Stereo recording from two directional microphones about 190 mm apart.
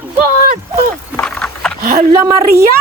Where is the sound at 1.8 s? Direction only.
45° right (ahead or behind).